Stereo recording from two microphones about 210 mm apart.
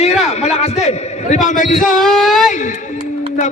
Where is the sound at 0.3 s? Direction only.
30° left (ahead or behind).